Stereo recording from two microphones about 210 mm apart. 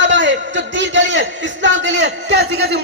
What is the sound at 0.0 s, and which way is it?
A man's voice, 60° right (ahead or behind).